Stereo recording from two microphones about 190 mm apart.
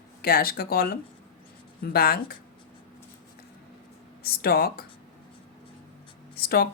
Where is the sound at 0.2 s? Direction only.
50° left (ahead or behind).